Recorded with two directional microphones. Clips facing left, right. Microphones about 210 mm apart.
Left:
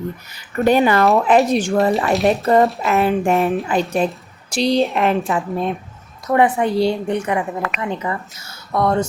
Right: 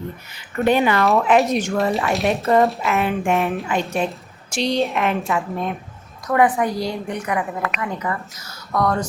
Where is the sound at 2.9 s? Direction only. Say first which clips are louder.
Left 4 dB; 35° left (ahead or behind).